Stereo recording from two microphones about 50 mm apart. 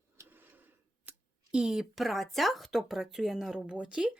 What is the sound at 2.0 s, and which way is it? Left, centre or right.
Speech, centre.